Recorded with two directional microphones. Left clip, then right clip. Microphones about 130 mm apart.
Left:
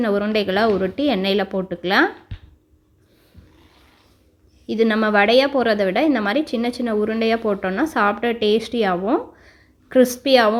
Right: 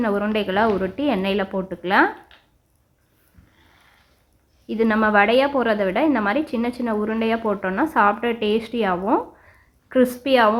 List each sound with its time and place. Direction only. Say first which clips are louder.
0.0 s a woman's voice: left 2 dB; 25° left (ahead or behind)
4.6 s a woman's voice: left 1 dB; 30° left (ahead or behind)